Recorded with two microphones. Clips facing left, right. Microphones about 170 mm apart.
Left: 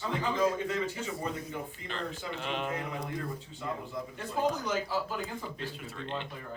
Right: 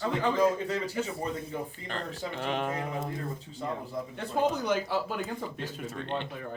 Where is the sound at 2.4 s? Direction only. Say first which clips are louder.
Right 3 dB; 45° right (ahead or behind).